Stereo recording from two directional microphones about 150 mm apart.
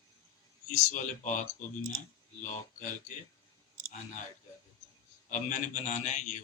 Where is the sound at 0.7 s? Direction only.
55° left (ahead or behind).